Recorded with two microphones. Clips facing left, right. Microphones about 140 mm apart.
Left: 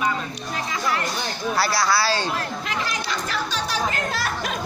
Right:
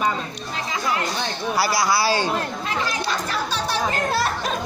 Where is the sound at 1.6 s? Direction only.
15° right (ahead or behind).